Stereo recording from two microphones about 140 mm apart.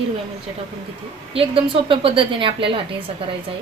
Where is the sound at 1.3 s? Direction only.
40° right (ahead or behind).